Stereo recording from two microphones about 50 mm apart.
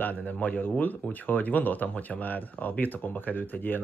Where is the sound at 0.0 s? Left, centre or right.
Left.